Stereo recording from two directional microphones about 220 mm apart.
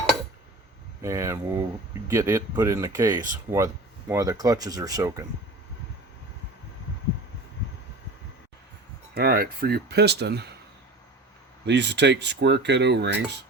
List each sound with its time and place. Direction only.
1.0 s speech: 15° right (ahead or behind)
9.1 s speech: 45° right (ahead or behind)
11.6 s speech: 50° right (ahead or behind)